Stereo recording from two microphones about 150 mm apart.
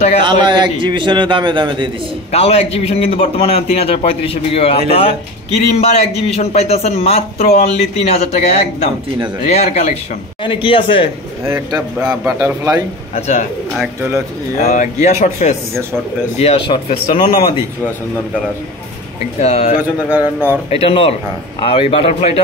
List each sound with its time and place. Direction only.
0.2 s a man's voice: 30° right (ahead or behind)
2.3 s a man's voice: 40° left (ahead or behind)
10.4 s a man's voice: 35° left (ahead or behind)
11.4 s a man's voice: 15° right (ahead or behind)
13.1 s a man's voice: 50° left (ahead or behind)
14.6 s a man's voice: 50° left (ahead or behind)
16.3 s a man's voice: 40° left (ahead or behind)
19.4 s a man's voice: 50° left (ahead or behind)
19.8 s a man's voice: 10° right (ahead or behind)
20.7 s a man's voice: 40° left (ahead or behind)